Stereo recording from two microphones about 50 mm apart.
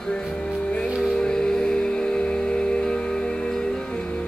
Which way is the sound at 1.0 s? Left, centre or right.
Centre.